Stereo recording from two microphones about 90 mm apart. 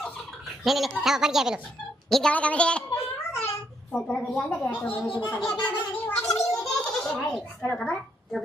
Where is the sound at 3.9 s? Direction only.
10° left (ahead or behind).